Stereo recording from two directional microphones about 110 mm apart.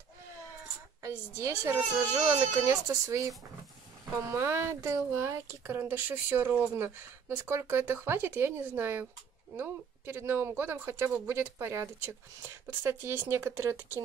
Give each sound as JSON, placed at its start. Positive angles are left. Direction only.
{"t": 1.4, "sound": "speech", "side_deg": -25}